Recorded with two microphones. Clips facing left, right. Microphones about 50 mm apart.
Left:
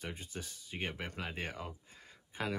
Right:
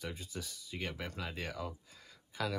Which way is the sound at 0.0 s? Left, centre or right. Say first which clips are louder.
Right 1 dB; left.